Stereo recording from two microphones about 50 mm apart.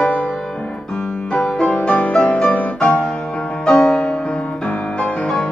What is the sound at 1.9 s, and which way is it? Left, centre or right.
Music, centre.